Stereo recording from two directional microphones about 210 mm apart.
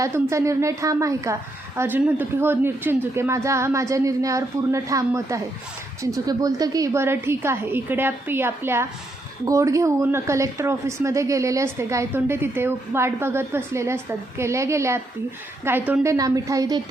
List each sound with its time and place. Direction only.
0.0 s speech: 15° right (ahead or behind)